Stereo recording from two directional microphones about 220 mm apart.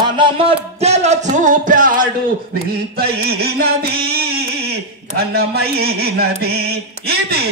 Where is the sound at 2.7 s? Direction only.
45° right (ahead or behind).